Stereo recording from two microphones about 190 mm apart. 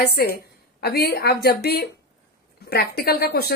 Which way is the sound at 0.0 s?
55° left (ahead or behind).